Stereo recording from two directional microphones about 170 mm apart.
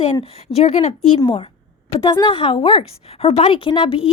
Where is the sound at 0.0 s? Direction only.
35° left (ahead or behind).